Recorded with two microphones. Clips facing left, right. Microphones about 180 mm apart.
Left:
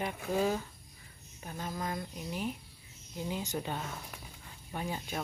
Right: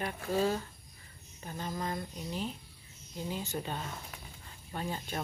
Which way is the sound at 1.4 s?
5° left (ahead or behind).